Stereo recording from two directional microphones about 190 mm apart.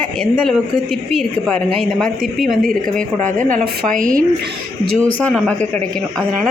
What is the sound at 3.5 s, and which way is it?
Speech, 45° right (ahead or behind).